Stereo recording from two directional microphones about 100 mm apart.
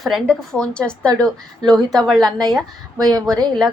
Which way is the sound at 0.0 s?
5° left (ahead or behind).